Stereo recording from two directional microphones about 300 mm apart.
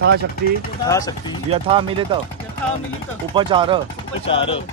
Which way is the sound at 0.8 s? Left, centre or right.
Centre.